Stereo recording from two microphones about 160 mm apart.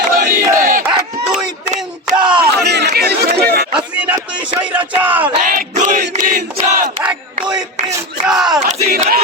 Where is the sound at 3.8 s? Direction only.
10° right (ahead or behind).